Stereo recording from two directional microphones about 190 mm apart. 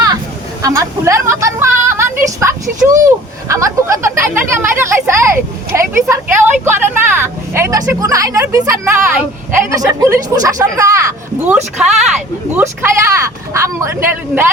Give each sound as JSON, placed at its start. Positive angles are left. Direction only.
{"t": 0.6, "sound": "a sound", "side_deg": -15}
{"t": 2.4, "sound": "speech", "side_deg": -15}
{"t": 11.5, "sound": "speech", "side_deg": 0}
{"t": 12.8, "sound": "speech", "side_deg": -15}